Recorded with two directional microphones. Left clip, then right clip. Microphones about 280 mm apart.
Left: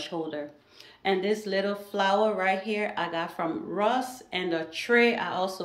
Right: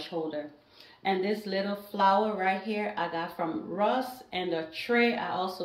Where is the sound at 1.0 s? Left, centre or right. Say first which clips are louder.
Left 3 dB; centre.